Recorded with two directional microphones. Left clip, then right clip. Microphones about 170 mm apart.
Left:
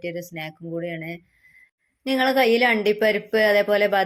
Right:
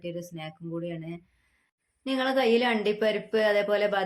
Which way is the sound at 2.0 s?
30° left (ahead or behind).